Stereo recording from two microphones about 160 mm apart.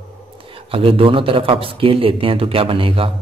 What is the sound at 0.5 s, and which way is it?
Speech, 35° right (ahead or behind).